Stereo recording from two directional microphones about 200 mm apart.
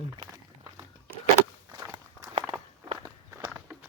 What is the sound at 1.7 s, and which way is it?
Walk, 20° right (ahead or behind).